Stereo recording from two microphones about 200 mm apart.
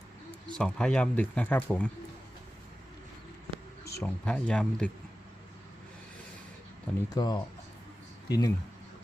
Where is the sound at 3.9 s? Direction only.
5° left (ahead or behind).